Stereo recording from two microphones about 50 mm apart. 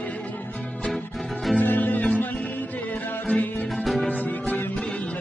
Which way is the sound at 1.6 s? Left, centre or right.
Left.